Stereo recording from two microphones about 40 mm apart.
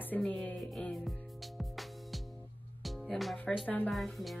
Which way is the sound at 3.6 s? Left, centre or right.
Left.